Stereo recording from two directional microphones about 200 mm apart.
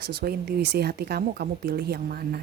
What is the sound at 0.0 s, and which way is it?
Speech, 50° right (ahead or behind).